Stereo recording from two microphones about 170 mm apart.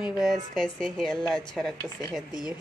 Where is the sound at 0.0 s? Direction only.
Centre (ahead or behind).